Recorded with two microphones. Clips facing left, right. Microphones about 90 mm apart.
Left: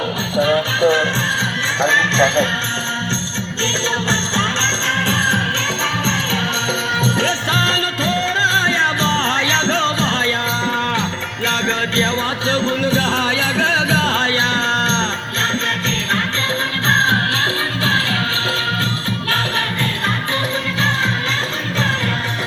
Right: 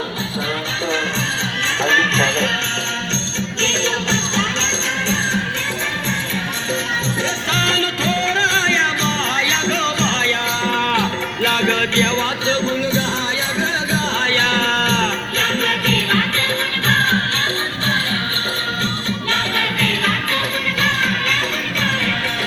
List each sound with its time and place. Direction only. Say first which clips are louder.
0.4 s music: left 10 dB; 60° left (ahead or behind)
1.8 s speech: left 2 dB; 30° left (ahead or behind)
3.6 s music: left 1 dB; 45° left (ahead or behind)
7.5 s music: left 1 dB; 40° left (ahead or behind)
10.2 s music: even; 5° left (ahead or behind)
11.6 s music: even; 30° left (ahead or behind)
13.6 s music: left 4 dB; 65° left (ahead or behind)
14.3 s music: even; 30° left (ahead or behind)